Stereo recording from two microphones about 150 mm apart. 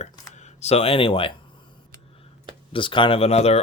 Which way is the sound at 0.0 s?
50° left (ahead or behind).